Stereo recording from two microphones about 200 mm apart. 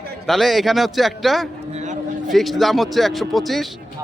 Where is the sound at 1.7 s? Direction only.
35° right (ahead or behind).